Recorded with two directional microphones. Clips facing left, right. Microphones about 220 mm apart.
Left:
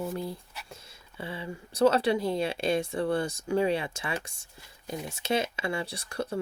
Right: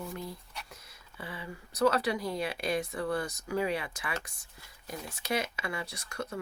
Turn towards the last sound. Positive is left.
turn(degrees=30)  # may be behind; listen again after turning